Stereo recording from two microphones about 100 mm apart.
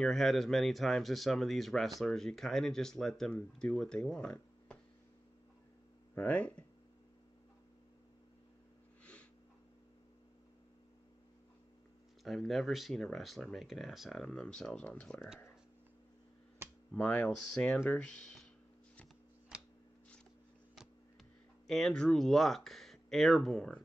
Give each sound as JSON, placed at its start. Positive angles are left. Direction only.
{"t": 0.0, "sound": "speech", "side_deg": 0}
{"t": 6.1, "sound": "speech", "side_deg": 15}
{"t": 12.2, "sound": "speech", "side_deg": 0}
{"t": 15.1, "sound": "speech", "side_deg": -5}
{"t": 16.9, "sound": "speech", "side_deg": 10}
{"t": 18.0, "sound": "speech", "side_deg": 5}
{"t": 21.6, "sound": "speech", "side_deg": 5}